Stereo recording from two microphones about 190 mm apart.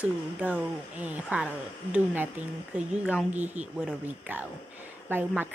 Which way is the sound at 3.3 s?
40° right (ahead or behind).